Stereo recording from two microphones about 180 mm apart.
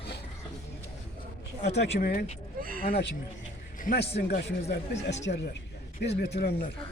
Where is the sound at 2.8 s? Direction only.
60° left (ahead or behind).